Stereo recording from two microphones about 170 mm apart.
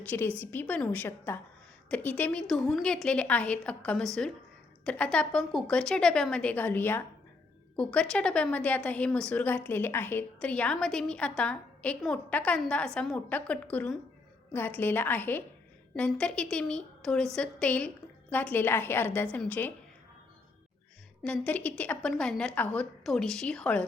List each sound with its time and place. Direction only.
0.1 s a woman's voice: 10° left (ahead or behind)
21.2 s a woman's voice: 10° left (ahead or behind)